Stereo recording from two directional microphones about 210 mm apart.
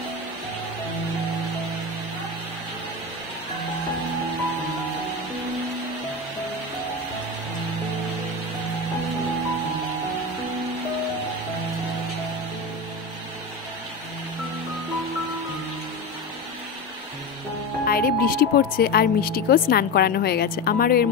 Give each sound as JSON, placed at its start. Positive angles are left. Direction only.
{"t": 17.8, "sound": "speech", "side_deg": 45}